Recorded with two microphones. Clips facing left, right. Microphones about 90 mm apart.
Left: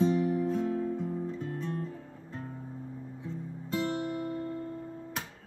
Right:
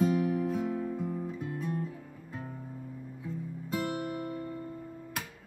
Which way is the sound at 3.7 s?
5° right (ahead or behind).